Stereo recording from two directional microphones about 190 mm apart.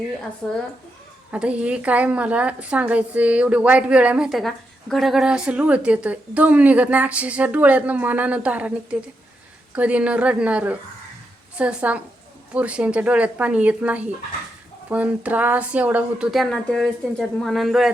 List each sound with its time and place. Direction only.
0.4 s speech: 5° left (ahead or behind)
1.3 s a woman's voice: 5° right (ahead or behind)